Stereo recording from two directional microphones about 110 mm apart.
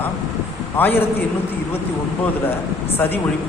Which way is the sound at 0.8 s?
15° left (ahead or behind).